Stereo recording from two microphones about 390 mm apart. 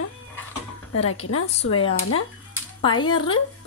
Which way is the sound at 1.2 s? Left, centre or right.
Left.